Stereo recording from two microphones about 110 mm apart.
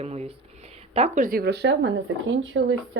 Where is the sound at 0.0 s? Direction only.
75° right (ahead or behind).